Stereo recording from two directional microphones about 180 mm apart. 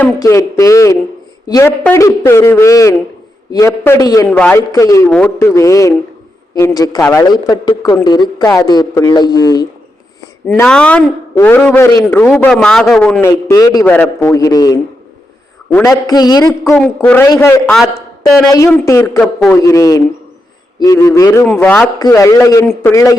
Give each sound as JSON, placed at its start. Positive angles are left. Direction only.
{"t": 0.0, "sound": "a man's voice", "side_deg": 15}
{"t": 4.3, "sound": "a man's voice", "side_deg": 10}
{"t": 10.4, "sound": "a man's voice", "side_deg": 5}
{"t": 13.2, "sound": "a man's voice", "side_deg": 20}
{"t": 16.7, "sound": "a man's voice", "side_deg": 10}
{"t": 18.7, "sound": "a man's voice", "side_deg": 15}
{"t": 21.4, "sound": "a man's voice", "side_deg": 5}
{"t": 21.9, "sound": "a man's voice", "side_deg": 20}